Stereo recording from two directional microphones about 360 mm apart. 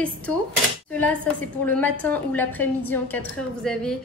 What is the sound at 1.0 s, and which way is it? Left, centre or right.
A woman's voice, centre.